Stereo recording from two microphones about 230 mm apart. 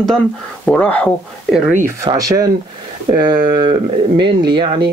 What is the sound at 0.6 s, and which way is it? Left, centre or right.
Speech, centre.